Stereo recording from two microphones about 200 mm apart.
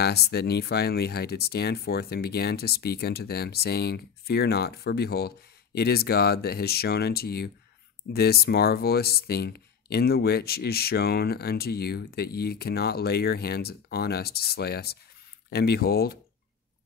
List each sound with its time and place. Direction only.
0.0 s speech: 55° left (ahead or behind)